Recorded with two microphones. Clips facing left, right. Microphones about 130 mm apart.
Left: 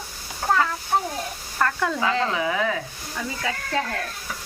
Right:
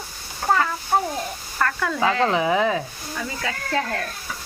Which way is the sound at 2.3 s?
25° right (ahead or behind).